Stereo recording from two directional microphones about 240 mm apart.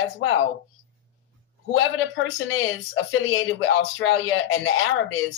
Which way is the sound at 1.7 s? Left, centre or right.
Left.